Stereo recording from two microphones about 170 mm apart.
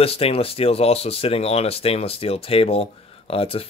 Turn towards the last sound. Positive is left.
turn(degrees=35)  # may be behind; listen again after turning